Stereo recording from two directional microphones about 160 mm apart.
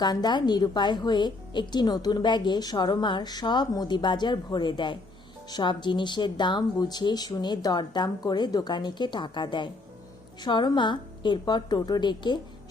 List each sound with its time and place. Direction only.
0.0 s a woman's voice: 25° left (ahead or behind)